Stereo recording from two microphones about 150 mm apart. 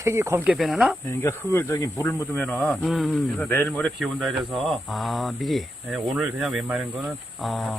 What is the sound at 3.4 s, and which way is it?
Speech, 10° left (ahead or behind).